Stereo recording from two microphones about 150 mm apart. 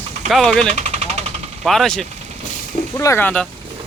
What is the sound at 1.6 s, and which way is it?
Speech, centre (ahead or behind).